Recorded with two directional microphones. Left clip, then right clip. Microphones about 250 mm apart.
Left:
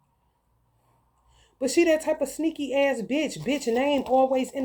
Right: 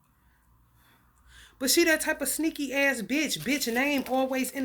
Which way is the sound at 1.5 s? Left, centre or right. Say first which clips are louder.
Left 2 dB; centre.